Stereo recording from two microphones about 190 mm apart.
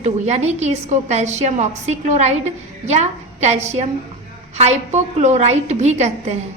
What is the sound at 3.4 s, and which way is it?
A woman's voice, 35° right (ahead or behind).